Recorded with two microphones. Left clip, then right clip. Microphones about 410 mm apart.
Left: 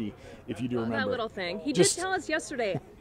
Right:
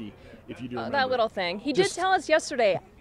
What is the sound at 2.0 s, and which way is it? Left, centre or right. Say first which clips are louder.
Speech: right 7 dB; right.